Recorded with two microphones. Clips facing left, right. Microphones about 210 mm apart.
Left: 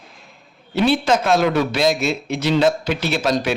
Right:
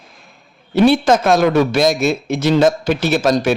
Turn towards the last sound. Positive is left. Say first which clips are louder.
# right 5 dB
turn(degrees=-45)  # may be behind; listen again after turning